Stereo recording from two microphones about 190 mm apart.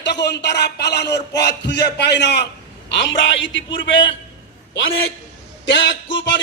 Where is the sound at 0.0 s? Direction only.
65° left (ahead or behind); by 4.9 s 90° left.